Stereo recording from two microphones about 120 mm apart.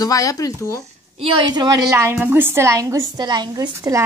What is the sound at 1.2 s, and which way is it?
Speech, 50° right (ahead or behind).